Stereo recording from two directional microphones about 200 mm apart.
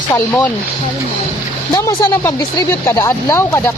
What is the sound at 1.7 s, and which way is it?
Speech, 20° left (ahead or behind).